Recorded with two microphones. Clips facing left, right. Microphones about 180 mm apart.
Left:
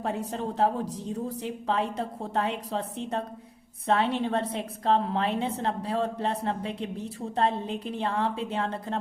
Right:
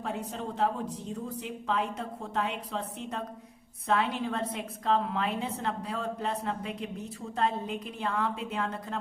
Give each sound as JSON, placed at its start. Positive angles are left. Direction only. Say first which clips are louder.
{"t": 0.0, "sound": "a woman's voice", "louder": "left 4 dB", "side_deg": 40}